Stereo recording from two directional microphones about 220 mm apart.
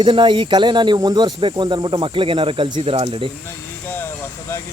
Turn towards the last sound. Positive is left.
turn(degrees=10)  # may be behind; listen again after turning